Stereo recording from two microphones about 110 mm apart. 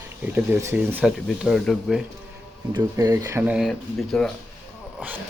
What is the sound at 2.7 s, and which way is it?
Speech, 30° right (ahead or behind).